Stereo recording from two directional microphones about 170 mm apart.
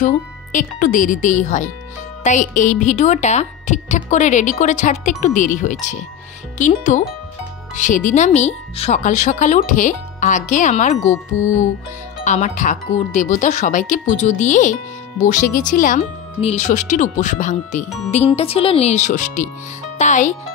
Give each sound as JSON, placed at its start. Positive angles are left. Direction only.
{"t": 0.0, "sound": "speech", "side_deg": 50}
{"t": 11.1, "sound": "speech", "side_deg": 15}
{"t": 12.3, "sound": "speech", "side_deg": 45}
{"t": 16.0, "sound": "speech", "side_deg": 35}
{"t": 17.8, "sound": "speech", "side_deg": 0}
{"t": 18.1, "sound": "speech", "side_deg": 40}